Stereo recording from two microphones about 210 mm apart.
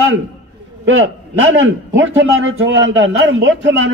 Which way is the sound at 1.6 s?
60° right (ahead or behind).